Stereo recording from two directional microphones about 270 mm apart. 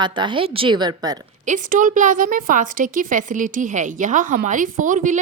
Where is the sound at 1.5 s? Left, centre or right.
Right.